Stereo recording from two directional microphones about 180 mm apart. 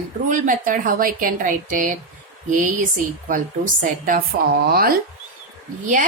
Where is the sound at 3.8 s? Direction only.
50° right (ahead or behind).